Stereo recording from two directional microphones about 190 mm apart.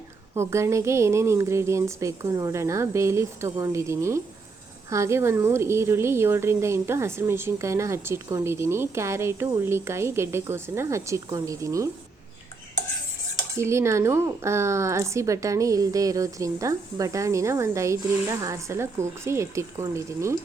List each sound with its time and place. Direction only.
0.3 s a woman's voice: 15° right (ahead or behind)
13.6 s a woman's voice: 15° right (ahead or behind)